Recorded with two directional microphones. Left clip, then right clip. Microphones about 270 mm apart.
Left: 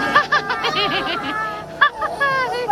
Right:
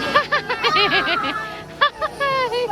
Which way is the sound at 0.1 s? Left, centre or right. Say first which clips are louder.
Left 1 dB; centre.